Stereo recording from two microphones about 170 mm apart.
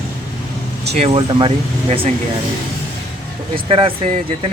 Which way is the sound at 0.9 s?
35° right (ahead or behind).